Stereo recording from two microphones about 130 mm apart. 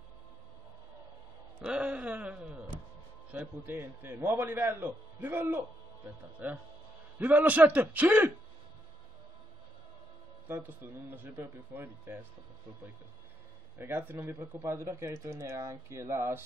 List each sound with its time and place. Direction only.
1.6 s a man's voice: 10° right (ahead or behind)
10.5 s a man's voice: 15° right (ahead or behind)
13.7 s speech: 15° right (ahead or behind)